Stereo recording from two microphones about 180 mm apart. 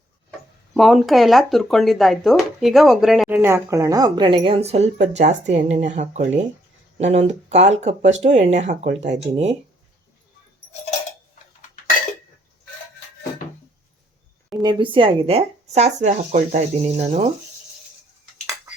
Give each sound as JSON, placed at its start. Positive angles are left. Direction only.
{"t": 0.3, "sound": "speech", "side_deg": 0}
{"t": 14.6, "sound": "a woman's voice", "side_deg": -25}